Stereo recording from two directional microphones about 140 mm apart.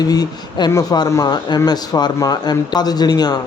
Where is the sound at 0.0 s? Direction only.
30° left (ahead or behind).